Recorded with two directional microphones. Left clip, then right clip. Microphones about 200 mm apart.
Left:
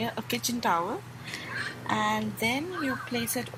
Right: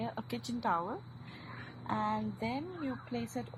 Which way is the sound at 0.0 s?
30° left (ahead or behind).